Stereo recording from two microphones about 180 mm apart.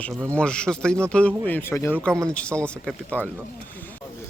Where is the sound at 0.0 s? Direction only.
5° left (ahead or behind).